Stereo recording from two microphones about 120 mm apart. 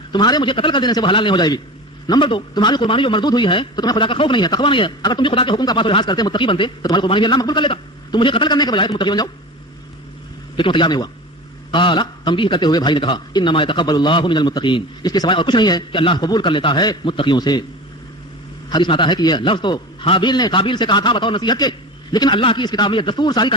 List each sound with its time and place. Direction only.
0.1 s a man's voice: 40° left (ahead or behind)
10.6 s a man's voice: 45° left (ahead or behind)
18.7 s a man's voice: 40° left (ahead or behind)